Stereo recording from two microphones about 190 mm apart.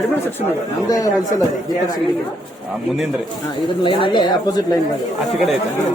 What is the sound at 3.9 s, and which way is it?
Speech, 25° left (ahead or behind).